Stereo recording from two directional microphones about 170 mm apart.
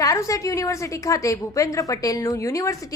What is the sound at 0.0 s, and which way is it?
A woman's voice, 20° left (ahead or behind).